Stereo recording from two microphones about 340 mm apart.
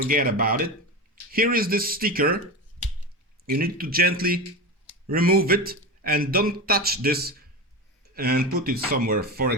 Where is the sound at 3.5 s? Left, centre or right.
Right.